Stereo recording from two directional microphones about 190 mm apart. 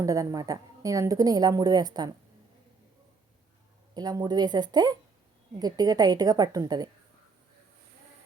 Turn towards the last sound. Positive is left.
turn(degrees=-20)  # may be behind; listen again after turning